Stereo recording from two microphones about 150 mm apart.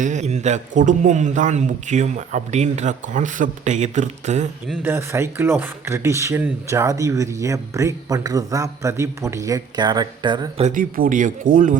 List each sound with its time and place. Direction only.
0.0 s a man's voice: 50° right (ahead or behind)
4.8 s speech: 15° right (ahead or behind)
10.6 s speech: 60° right (ahead or behind)